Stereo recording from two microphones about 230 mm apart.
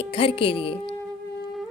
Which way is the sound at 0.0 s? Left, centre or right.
Left.